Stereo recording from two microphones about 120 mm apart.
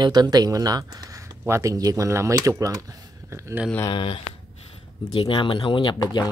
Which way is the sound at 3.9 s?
45° left (ahead or behind).